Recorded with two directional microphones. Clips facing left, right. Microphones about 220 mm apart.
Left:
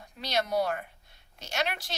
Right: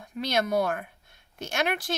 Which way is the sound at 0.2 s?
50° right (ahead or behind).